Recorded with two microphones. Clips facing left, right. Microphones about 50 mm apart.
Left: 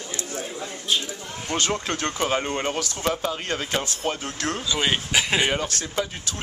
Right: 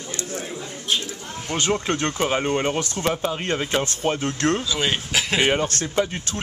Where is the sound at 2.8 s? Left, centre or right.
Right.